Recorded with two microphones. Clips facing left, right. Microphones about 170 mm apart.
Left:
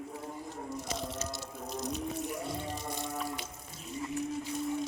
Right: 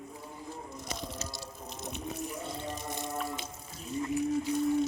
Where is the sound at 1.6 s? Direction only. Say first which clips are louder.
Left 6 dB; 40° left (ahead or behind).